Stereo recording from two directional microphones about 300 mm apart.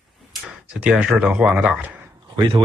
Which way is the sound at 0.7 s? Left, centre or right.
Centre.